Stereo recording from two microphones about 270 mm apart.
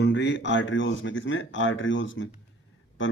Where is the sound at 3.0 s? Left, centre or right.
Left.